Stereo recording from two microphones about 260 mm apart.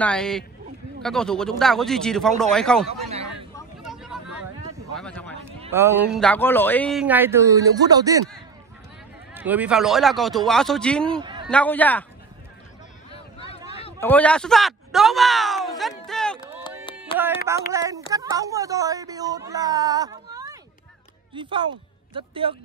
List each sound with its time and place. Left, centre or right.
0.0 s speech: centre
2.9 s a man's voice: right
3.8 s vehicle: centre
4.9 s a sound: centre
5.7 s speech: centre
6.2 s speech: centre
9.3 s speech: centre
13.9 s speech: centre
16.1 s a sound: centre
17.1 s speech: left
17.7 s a man's voice: centre